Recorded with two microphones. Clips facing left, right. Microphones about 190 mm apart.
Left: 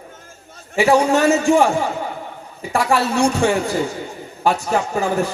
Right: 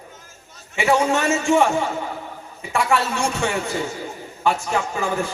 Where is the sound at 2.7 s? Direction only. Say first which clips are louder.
Left 3 dB; 35° left (ahead or behind).